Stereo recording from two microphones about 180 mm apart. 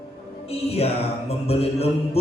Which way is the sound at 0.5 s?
35° left (ahead or behind).